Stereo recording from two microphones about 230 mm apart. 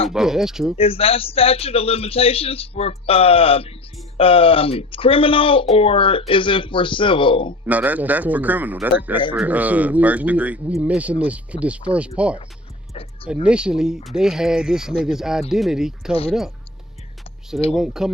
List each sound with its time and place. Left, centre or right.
0.1 s speech: centre
0.8 s a man's voice: left
7.7 s a man's voice: centre
17.7 s speech: centre